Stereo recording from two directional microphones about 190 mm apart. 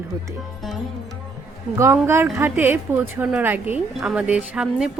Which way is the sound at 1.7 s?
15° right (ahead or behind).